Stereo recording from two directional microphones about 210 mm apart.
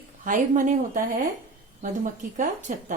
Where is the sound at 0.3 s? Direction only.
40° right (ahead or behind).